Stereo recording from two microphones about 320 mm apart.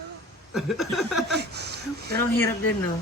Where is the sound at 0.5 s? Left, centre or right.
Centre.